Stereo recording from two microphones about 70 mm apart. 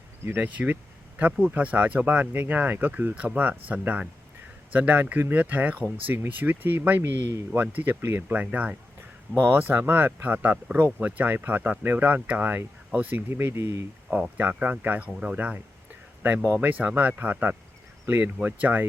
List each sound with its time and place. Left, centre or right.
0.3 s speech: right
9.4 s speech: right
14.2 s speech: right
16.6 s speech: right